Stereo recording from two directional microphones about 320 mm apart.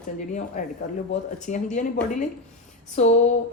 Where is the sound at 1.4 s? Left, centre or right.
Left.